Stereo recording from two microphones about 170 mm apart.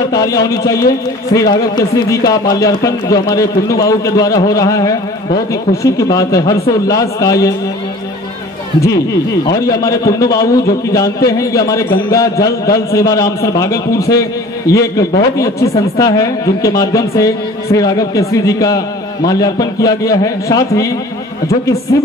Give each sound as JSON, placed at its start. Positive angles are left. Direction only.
{"t": 0.1, "sound": "speech", "side_deg": 20}
{"t": 9.7, "sound": "speech", "side_deg": 20}